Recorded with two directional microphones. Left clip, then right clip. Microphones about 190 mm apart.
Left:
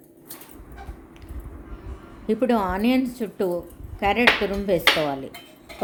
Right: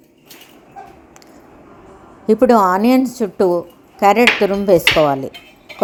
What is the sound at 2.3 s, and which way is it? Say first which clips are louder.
A woman's voice: right 11 dB; 35° right (ahead or behind).